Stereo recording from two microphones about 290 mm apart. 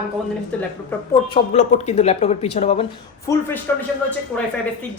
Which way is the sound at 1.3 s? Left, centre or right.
Left.